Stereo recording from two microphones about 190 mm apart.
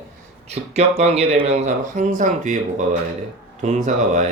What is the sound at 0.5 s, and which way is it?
Speech, 35° right (ahead or behind).